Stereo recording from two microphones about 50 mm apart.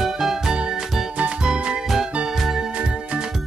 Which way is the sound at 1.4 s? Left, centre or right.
Centre.